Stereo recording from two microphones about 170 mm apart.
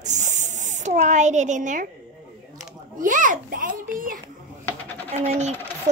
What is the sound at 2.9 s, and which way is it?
Music, 50° right (ahead or behind).